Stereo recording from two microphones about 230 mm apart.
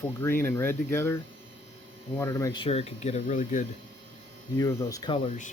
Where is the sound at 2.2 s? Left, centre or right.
Centre; by 3.6 s left.